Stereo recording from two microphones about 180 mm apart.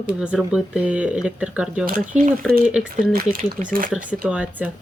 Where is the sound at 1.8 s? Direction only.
45° right (ahead or behind).